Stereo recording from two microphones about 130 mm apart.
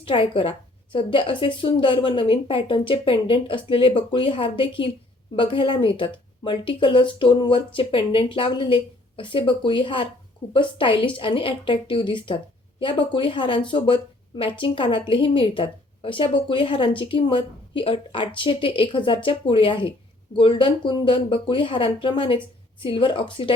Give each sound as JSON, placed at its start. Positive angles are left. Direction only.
{"t": 0.0, "sound": "a woman's voice", "side_deg": 45}